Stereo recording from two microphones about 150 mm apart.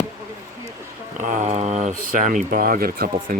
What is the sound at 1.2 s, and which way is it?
Speech, 55° right (ahead or behind).